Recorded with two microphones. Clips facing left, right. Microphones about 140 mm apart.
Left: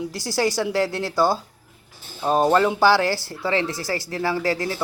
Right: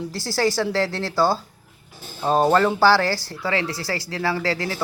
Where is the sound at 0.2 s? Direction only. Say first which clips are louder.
Right 1 dB; 20° left (ahead or behind).